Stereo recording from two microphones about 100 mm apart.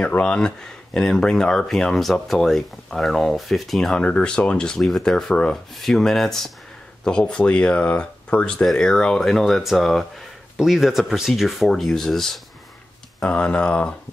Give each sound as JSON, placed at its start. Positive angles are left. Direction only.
{"t": 0.0, "sound": "speech", "side_deg": 10}